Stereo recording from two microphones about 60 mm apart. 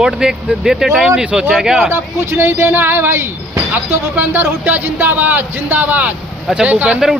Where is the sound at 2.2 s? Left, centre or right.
Right.